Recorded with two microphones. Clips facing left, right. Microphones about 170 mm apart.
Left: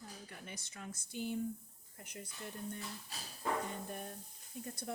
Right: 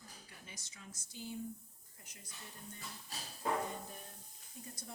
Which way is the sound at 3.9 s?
60° left (ahead or behind).